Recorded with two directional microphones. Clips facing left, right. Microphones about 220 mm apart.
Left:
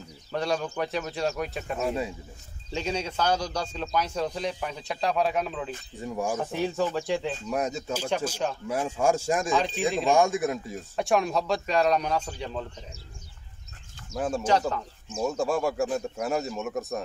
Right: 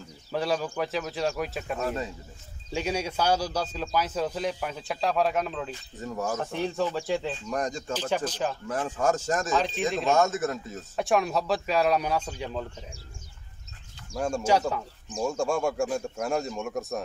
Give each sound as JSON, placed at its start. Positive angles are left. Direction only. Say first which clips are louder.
{"t": 0.3, "sound": "speech", "louder": "even", "side_deg": -5}
{"t": 1.9, "sound": "speech", "louder": "left 2 dB", "side_deg": 10}
{"t": 2.7, "sound": "a man's voice", "louder": "right 1 dB", "side_deg": -10}
{"t": 11.0, "sound": "a man's voice", "louder": "even", "side_deg": 0}
{"t": 14.1, "sound": "speech", "louder": "even", "side_deg": 5}
{"t": 14.7, "sound": "speech", "louder": "even", "side_deg": -10}
{"t": 15.1, "sound": "speech", "louder": "even", "side_deg": 5}